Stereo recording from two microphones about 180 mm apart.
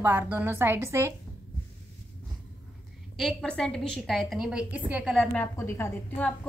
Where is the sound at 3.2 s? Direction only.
Centre (ahead or behind).